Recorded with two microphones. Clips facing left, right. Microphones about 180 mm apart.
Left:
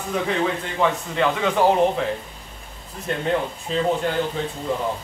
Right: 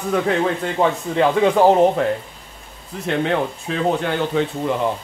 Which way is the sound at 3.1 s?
75° right (ahead or behind).